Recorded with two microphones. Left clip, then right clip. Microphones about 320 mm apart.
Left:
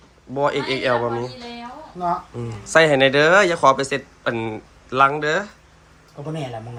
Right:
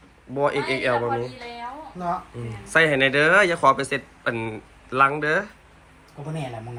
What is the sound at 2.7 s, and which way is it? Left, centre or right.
Speech, centre.